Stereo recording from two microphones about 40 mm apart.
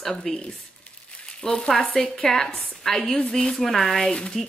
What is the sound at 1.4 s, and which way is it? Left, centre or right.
Frying, centre.